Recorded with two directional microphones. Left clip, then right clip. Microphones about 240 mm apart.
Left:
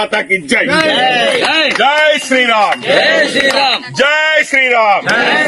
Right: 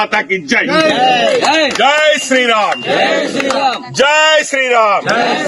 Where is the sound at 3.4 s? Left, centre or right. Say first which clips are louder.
Left 3 dB; right.